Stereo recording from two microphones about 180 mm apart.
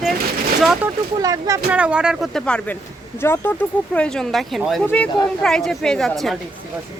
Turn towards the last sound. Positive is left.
turn(degrees=0)  # may be behind; listen again after turning